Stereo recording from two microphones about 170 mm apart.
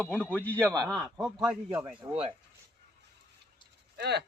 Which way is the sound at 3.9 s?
75° right (ahead or behind).